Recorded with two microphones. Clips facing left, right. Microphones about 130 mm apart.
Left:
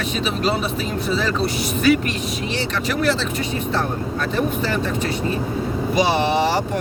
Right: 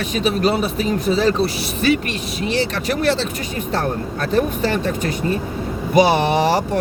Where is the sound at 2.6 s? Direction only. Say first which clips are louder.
Right 2 dB; 40° right (ahead or behind).